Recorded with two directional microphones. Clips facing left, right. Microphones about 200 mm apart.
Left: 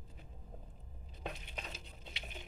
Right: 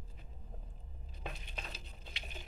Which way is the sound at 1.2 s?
20° left (ahead or behind).